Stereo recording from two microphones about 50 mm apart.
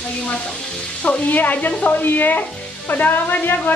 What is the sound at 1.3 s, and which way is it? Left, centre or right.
Speech, left.